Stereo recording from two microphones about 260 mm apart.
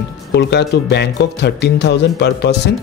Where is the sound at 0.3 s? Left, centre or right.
Left.